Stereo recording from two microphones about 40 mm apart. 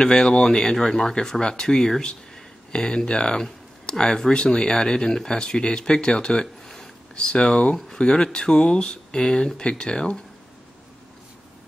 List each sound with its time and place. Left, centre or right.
0.0 s speech: centre